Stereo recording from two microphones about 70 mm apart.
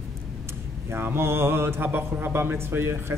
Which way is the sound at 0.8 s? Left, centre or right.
Right.